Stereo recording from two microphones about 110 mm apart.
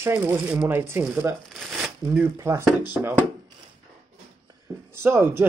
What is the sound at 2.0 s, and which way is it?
Speech, 15° right (ahead or behind).